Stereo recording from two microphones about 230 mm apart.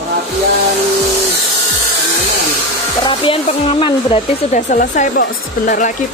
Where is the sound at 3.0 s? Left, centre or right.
Left.